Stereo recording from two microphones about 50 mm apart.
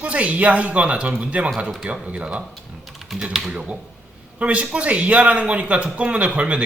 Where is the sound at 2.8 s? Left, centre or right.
Centre.